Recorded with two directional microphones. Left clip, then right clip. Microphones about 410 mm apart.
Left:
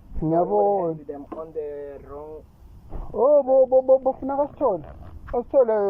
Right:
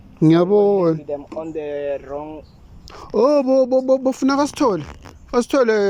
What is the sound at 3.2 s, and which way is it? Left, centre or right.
Speech, right.